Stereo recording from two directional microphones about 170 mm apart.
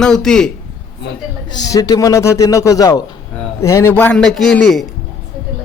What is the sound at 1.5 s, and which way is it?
A man's voice, 20° left (ahead or behind).